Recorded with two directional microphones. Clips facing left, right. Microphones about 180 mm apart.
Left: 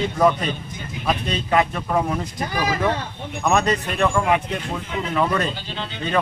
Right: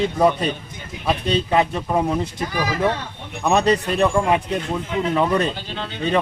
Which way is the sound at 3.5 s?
30° right (ahead or behind).